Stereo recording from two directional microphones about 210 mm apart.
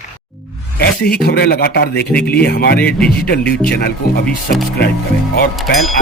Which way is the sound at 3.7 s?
50° left (ahead or behind).